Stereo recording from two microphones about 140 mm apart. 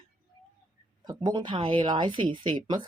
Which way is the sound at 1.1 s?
30° right (ahead or behind).